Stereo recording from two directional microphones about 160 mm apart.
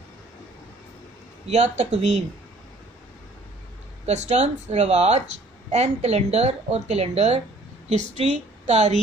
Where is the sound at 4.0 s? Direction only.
45° right (ahead or behind).